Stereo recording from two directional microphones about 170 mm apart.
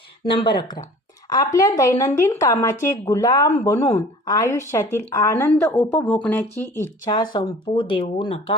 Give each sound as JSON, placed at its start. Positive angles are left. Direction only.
{"t": 0.3, "sound": "a woman's voice", "side_deg": 25}
{"t": 6.8, "sound": "a woman's voice", "side_deg": 25}